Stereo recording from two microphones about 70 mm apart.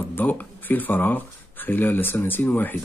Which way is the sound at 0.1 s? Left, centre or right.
Left.